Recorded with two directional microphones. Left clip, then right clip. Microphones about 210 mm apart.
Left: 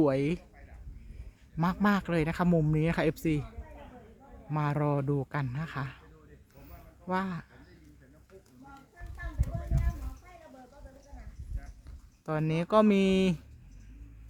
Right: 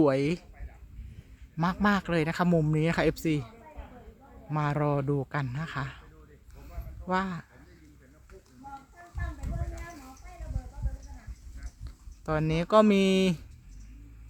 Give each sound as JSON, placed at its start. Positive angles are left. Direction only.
{"t": 0.0, "sound": "speech", "side_deg": -10}
{"t": 1.5, "sound": "a man's voice", "side_deg": 0}
{"t": 4.5, "sound": "a man's voice", "side_deg": -5}
{"t": 7.1, "sound": "a man's voice", "side_deg": -5}
{"t": 9.6, "sound": "a sound", "side_deg": 50}
{"t": 12.2, "sound": "speech", "side_deg": -10}